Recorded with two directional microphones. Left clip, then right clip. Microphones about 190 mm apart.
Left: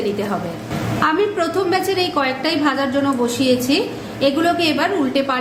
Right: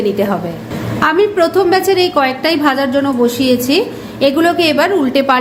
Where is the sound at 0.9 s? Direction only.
30° right (ahead or behind).